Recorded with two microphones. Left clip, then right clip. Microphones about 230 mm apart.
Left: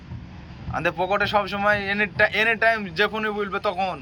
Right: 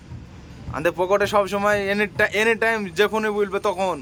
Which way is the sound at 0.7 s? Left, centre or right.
Centre.